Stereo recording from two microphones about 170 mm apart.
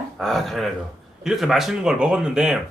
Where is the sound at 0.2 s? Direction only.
Centre (ahead or behind).